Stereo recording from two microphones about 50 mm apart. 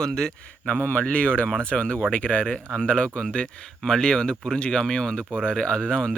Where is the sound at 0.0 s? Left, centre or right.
Centre.